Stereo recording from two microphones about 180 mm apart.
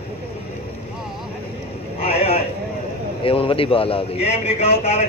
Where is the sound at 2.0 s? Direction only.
35° left (ahead or behind).